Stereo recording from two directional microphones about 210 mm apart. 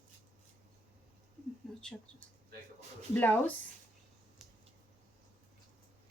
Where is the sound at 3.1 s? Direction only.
10° left (ahead or behind).